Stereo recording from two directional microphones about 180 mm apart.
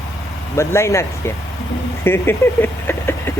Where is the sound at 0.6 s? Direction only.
15° left (ahead or behind).